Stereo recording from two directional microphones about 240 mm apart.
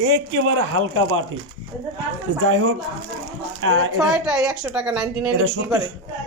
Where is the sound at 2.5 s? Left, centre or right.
Right.